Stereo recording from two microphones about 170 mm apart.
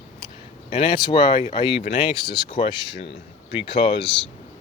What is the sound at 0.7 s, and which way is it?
Speech, 35° left (ahead or behind).